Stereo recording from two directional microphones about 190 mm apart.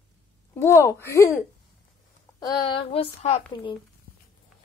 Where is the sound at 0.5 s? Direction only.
15° left (ahead or behind).